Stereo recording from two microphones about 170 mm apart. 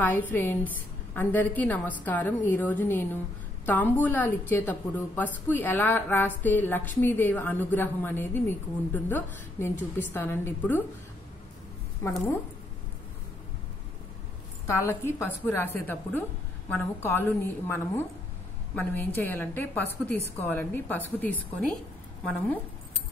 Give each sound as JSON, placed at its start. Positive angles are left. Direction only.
{"t": 0.0, "sound": "a woman's voice", "side_deg": 10}
{"t": 12.0, "sound": "a woman's voice", "side_deg": 15}
{"t": 14.8, "sound": "a woman's voice", "side_deg": 15}